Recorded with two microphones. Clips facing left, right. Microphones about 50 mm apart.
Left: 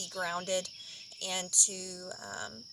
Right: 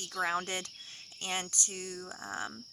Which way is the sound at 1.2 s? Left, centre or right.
Right.